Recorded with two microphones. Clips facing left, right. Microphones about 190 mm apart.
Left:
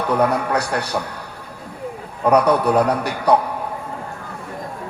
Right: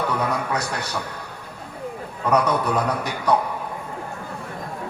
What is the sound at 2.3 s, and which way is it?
Speech, 65° left (ahead or behind).